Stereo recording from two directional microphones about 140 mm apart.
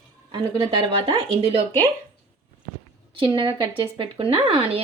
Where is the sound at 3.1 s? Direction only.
35° right (ahead or behind).